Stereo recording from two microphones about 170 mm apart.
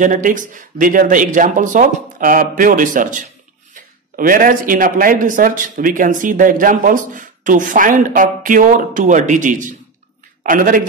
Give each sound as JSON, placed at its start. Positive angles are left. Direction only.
{"t": 0.0, "sound": "speech", "side_deg": -50}